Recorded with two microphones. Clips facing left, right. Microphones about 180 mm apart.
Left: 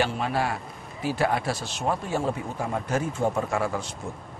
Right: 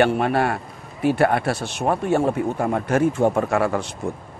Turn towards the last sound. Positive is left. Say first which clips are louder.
# right 6 dB
turn(degrees=-65)  # may be behind; listen again after turning